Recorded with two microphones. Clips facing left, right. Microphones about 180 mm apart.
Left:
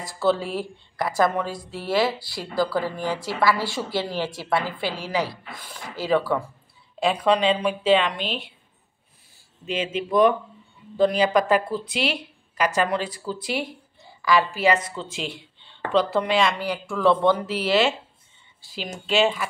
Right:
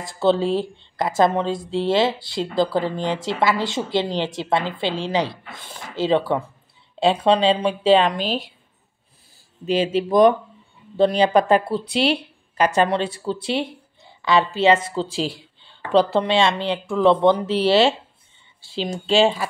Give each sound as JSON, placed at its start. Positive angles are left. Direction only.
{"t": 0.0, "sound": "a woman's voice", "side_deg": -25}
{"t": 9.9, "sound": "a woman's voice", "side_deg": -35}